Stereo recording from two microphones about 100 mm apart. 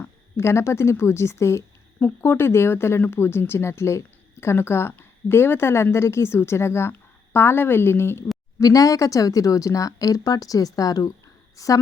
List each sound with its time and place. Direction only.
0.0 s speech: 25° left (ahead or behind)
8.6 s a woman's voice: 35° left (ahead or behind)